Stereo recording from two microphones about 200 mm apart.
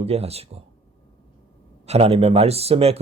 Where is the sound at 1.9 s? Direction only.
30° right (ahead or behind).